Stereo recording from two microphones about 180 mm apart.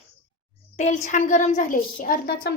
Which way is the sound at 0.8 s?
40° left (ahead or behind).